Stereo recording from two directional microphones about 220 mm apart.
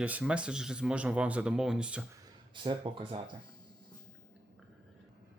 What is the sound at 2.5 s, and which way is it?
Speech, 20° right (ahead or behind).